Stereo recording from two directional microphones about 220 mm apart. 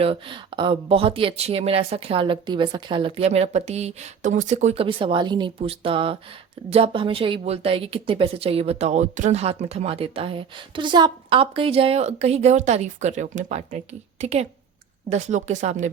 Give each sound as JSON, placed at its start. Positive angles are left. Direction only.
{"t": 0.0, "sound": "a woman's voice", "side_deg": -25}